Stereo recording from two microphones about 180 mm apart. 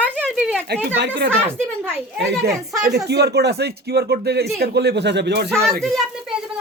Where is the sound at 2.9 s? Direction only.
65° right (ahead or behind).